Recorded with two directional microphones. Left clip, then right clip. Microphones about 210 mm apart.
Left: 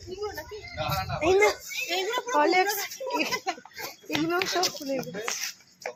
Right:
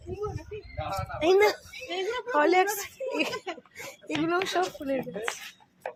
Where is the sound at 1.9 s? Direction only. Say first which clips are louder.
Left 2 dB; 20° left (ahead or behind).